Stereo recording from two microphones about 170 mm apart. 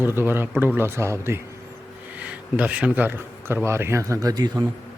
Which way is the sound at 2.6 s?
5° right (ahead or behind).